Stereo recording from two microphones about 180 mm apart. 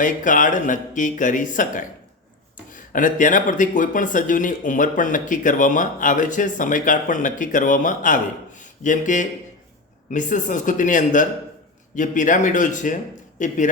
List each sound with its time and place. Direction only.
0.0 s speech: 45° left (ahead or behind)